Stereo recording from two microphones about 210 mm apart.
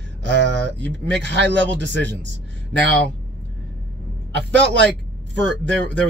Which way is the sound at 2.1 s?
55° right (ahead or behind).